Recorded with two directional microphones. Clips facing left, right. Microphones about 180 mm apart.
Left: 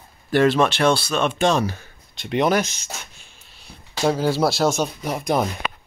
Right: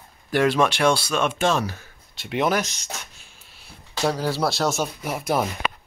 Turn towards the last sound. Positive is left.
turn(degrees=-5)  # may be behind; listen again after turning